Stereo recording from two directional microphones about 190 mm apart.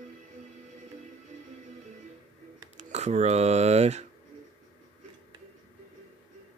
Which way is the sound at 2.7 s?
35° right (ahead or behind).